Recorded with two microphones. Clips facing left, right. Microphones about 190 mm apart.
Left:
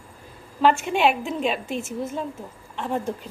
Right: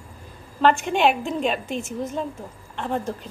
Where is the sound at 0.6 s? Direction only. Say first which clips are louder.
Right 1 dB; 5° left (ahead or behind).